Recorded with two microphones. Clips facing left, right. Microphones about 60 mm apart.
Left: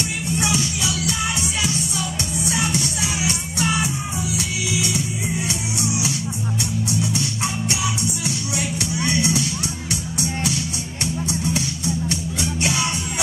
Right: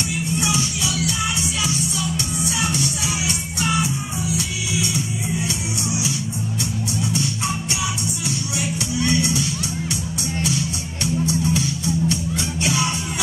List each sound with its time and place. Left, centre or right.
8.9 s music: left